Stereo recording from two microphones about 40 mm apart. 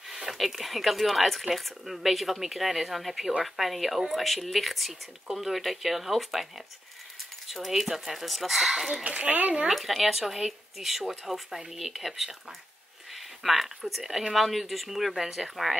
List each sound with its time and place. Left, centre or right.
0.1 s a sound: centre
0.4 s speech: centre
7.4 s speech: centre
9.0 s a child's voice: right
9.7 s speech: centre